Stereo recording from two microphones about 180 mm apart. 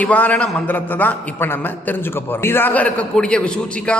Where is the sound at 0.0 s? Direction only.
10° left (ahead or behind).